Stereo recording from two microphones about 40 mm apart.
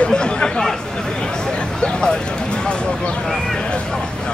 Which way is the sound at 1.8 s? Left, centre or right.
Left.